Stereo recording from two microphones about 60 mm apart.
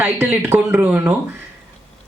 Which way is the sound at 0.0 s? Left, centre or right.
Right.